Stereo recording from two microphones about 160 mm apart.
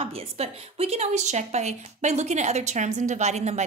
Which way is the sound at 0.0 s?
35° right (ahead or behind).